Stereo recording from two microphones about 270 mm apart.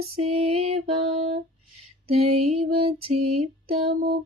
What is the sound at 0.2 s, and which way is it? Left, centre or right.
Music, right.